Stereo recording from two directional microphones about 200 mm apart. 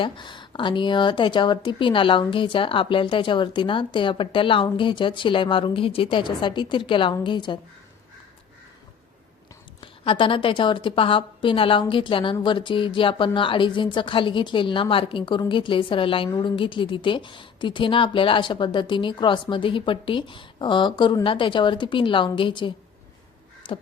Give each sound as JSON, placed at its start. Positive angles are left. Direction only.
{"t": 0.0, "sound": "a woman's voice", "side_deg": 25}
{"t": 9.8, "sound": "a woman's voice", "side_deg": 25}
{"t": 23.6, "sound": "beatboxing", "side_deg": 25}